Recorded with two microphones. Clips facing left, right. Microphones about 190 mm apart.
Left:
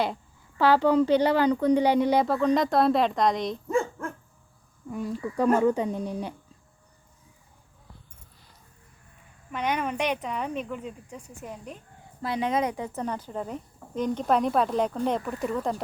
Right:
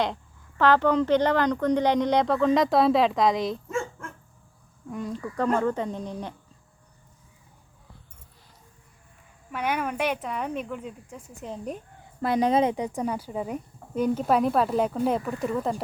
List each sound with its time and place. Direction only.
0.0 s speech: 10° left (ahead or behind)
4.9 s speech: 5° left (ahead or behind)
9.5 s speech: 10° right (ahead or behind)
11.4 s speech: 20° right (ahead or behind)
12.2 s speech: 50° right (ahead or behind)
12.5 s speech: 25° right (ahead or behind); by 15.8 s 5° right (ahead or behind)